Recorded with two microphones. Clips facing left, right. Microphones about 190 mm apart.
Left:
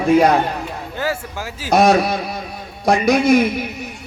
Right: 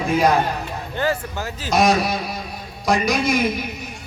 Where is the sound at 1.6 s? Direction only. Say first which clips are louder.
Left 4 dB; 60° left (ahead or behind).